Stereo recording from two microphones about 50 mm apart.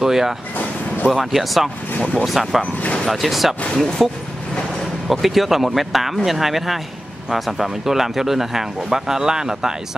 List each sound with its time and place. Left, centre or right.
0.0 s speech: centre
2.6 s speech: left
3.1 s speech: centre
5.1 s speech: centre